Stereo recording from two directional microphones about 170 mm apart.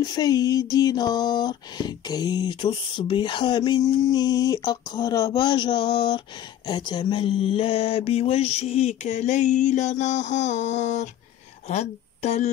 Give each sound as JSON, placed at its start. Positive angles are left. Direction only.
{"t": 0.0, "sound": "a sound", "side_deg": 20}
{"t": 6.7, "sound": "mantra", "side_deg": 25}
{"t": 11.6, "sound": "speech", "side_deg": 40}